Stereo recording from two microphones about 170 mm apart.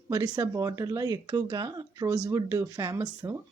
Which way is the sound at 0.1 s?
20° right (ahead or behind).